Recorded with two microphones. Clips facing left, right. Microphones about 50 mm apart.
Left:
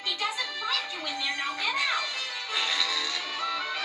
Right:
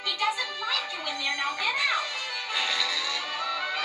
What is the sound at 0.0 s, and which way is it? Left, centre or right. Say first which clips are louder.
Music: right 2 dB; right.